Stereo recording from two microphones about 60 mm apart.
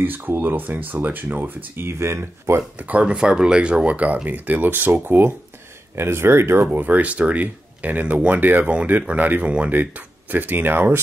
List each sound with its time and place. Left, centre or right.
0.0 s speech: right
2.0 s speech: right
2.8 s speech: right